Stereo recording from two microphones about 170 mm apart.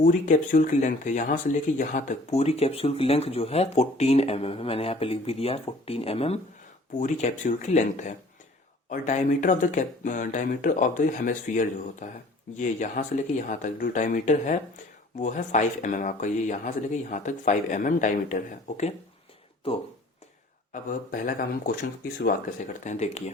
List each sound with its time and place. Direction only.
0.0 s speech: 50° left (ahead or behind)
19.6 s speech: 35° left (ahead or behind)
21.1 s speech: 60° left (ahead or behind)
22.6 s speech: 45° left (ahead or behind)